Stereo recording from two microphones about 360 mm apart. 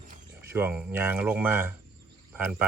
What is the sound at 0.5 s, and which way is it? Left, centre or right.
Speech, centre.